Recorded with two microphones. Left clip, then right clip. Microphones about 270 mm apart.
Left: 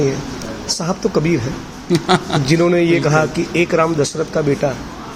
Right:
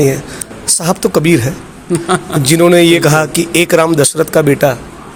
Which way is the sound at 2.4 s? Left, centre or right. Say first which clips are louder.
Right 7 dB; right.